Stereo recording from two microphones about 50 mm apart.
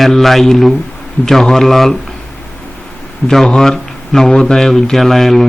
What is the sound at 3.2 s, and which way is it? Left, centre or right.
Speech, centre.